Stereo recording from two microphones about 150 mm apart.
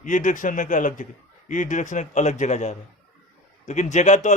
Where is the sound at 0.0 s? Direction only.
55° left (ahead or behind).